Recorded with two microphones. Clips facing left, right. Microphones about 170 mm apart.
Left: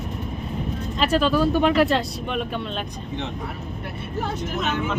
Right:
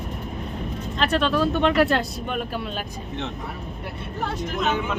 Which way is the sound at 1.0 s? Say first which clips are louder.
Left 2 dB; 5° left (ahead or behind).